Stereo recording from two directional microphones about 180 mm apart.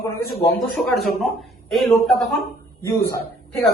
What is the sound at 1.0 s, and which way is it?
A woman's voice, centre (ahead or behind).